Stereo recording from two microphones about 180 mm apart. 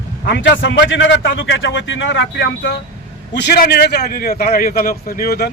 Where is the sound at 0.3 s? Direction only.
75° left (ahead or behind); by 5.5 s 60° left (ahead or behind).